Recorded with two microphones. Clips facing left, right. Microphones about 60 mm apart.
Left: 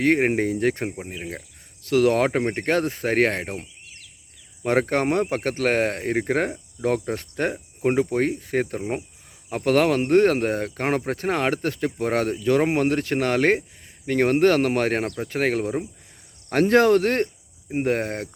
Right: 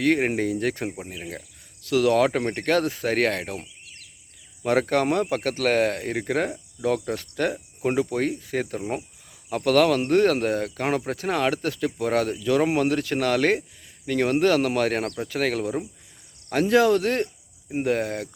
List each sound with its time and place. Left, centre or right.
0.0 s speech: left
0.9 s speech: left
16.5 s speech: left